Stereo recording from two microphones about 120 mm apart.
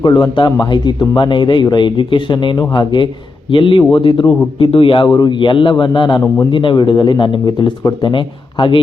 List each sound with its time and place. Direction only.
0.0 s a man's voice: 40° left (ahead or behind)
5.0 s a man's voice: 35° left (ahead or behind)
6.2 s a man's voice: 20° left (ahead or behind)
6.5 s speech: 45° left (ahead or behind)